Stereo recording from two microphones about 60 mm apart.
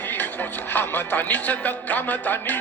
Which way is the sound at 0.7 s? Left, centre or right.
Left.